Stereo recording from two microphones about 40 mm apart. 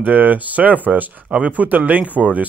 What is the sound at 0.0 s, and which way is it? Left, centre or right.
Speech, right.